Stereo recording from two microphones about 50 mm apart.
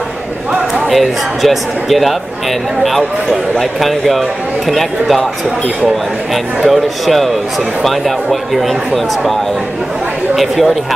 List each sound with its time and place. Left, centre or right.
0.8 s speech: centre
6.3 s speech: centre